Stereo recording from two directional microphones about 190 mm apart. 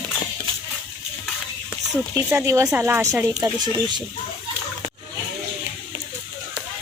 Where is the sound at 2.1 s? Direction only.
15° right (ahead or behind).